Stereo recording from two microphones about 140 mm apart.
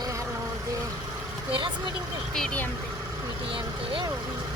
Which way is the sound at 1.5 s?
35° right (ahead or behind).